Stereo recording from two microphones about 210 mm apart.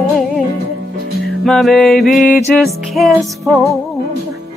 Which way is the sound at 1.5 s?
Centre (ahead or behind).